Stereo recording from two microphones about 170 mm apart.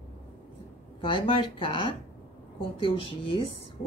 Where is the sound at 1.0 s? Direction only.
30° left (ahead or behind).